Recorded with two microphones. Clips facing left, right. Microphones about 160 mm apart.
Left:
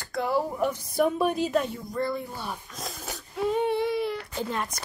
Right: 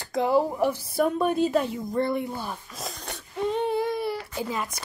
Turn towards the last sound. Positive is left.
turn(degrees=-5)  # may be behind; listen again after turning